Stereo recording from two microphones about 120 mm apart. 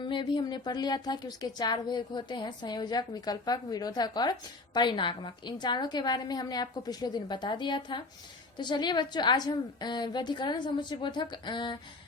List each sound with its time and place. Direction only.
0.0 s speech: 40° left (ahead or behind)